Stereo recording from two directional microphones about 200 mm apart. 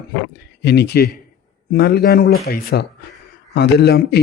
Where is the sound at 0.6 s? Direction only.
55° left (ahead or behind).